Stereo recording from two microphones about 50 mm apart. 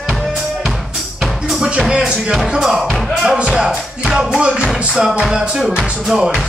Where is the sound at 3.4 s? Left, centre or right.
Centre.